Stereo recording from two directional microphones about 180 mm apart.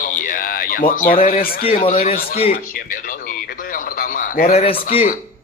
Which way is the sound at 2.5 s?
50° left (ahead or behind).